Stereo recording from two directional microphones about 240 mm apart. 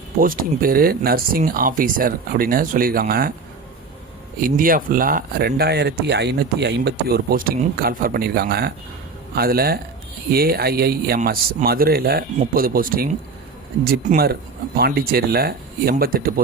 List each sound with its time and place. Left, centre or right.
0.2 s speech: right
4.4 s speech: right